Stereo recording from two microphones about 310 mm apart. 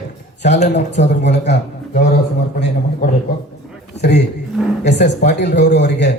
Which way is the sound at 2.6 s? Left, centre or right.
Left.